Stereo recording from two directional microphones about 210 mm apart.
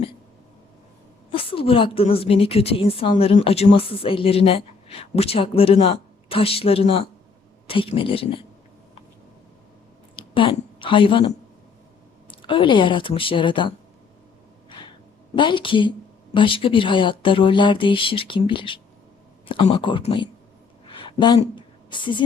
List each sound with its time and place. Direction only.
1.3 s a woman's voice: 25° left (ahead or behind)
10.2 s a woman's voice: 25° left (ahead or behind)
15.4 s a woman's voice: 20° left (ahead or behind)
20.8 s a sound: 25° left (ahead or behind)